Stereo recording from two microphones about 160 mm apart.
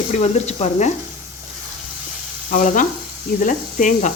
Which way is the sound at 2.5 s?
50° left (ahead or behind).